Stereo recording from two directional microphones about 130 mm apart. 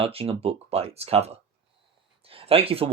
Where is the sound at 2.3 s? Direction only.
45° right (ahead or behind).